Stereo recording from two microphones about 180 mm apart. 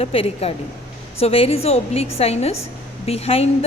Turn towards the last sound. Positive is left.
turn(degrees=35)  # may be behind; listen again after turning